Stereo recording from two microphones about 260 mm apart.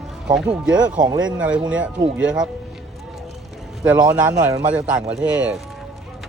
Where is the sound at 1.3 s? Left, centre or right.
Centre.